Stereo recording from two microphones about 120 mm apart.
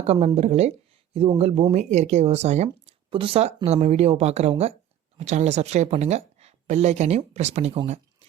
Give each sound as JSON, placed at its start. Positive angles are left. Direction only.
{"t": 0.0, "sound": "speech", "side_deg": -60}
{"t": 1.7, "sound": "speech", "side_deg": -70}
{"t": 2.6, "sound": "speech", "side_deg": -45}